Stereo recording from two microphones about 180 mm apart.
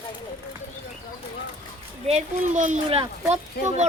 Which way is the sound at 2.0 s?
40° right (ahead or behind).